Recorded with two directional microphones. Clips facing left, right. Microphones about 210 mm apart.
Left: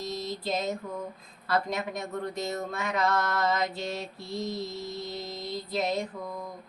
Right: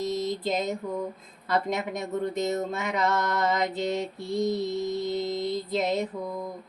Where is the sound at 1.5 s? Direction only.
20° right (ahead or behind).